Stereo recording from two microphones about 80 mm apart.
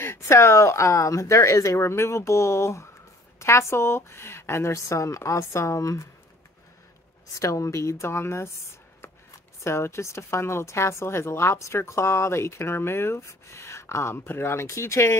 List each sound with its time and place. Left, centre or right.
0.0 s speech: left
7.3 s speech: left
9.6 s speech: left